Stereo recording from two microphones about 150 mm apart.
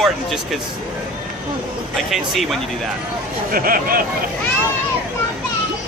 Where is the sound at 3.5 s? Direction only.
75° right (ahead or behind).